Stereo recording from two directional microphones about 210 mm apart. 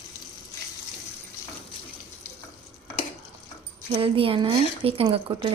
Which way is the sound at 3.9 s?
25° right (ahead or behind).